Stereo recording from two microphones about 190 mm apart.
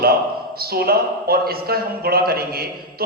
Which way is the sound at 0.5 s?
55° right (ahead or behind).